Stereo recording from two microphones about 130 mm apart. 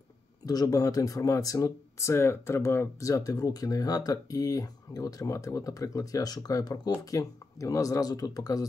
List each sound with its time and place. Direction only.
0.5 s speech: 30° left (ahead or behind)